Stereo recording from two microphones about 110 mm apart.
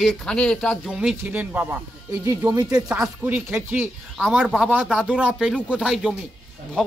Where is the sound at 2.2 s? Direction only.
30° right (ahead or behind).